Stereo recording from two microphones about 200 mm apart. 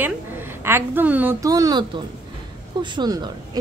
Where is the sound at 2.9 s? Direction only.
20° right (ahead or behind).